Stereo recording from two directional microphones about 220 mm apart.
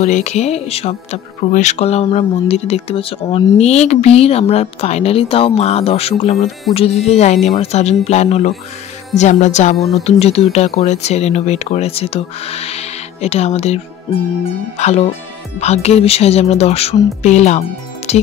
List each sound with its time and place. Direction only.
0.0 s speech: 30° left (ahead or behind)
9.8 s speech: centre (ahead or behind)
10.0 s speech: 30° left (ahead or behind)
14.8 s speech: 30° left (ahead or behind)